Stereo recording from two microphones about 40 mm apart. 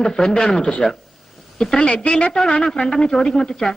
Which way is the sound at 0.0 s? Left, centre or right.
Centre.